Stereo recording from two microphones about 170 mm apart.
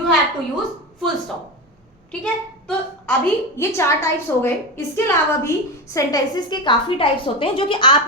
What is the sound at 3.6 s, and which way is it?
A woman's voice, 15° left (ahead or behind).